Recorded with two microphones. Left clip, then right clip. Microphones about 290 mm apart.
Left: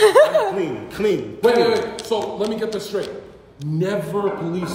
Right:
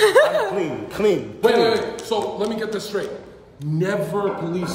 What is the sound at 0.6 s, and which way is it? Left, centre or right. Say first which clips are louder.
Speech: even; centre.